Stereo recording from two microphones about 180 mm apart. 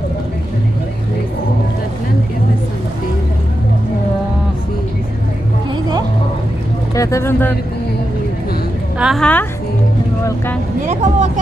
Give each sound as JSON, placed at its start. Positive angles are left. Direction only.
{"t": 7.0, "sound": "speech", "side_deg": 15}
{"t": 8.9, "sound": "a woman's voice", "side_deg": 0}
{"t": 10.8, "sound": "speech", "side_deg": -40}